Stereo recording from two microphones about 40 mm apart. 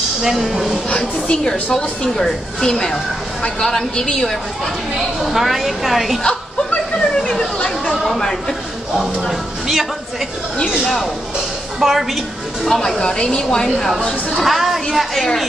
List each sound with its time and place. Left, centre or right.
0.2 s a woman's voice: centre
0.8 s a woman's voice: left
4.9 s a woman's voice: centre
7.0 s chatter: centre
7.9 s a woman's voice: centre
8.2 s a woman's voice: centre
8.9 s a man's voice: centre
11.8 s a woman's voice: centre
12.6 s a woman's voice: centre
13.0 s a woman's voice: left
14.3 s a woman's voice: centre